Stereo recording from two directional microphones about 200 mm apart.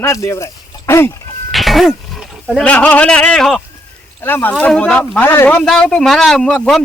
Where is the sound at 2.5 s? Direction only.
5° left (ahead or behind).